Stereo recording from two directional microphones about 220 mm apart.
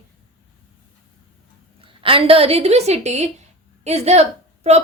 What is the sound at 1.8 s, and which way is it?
A woman's voice, 25° right (ahead or behind).